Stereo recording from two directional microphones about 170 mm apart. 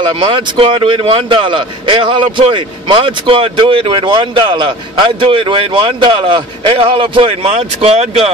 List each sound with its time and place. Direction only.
0.0 s speech: 30° right (ahead or behind)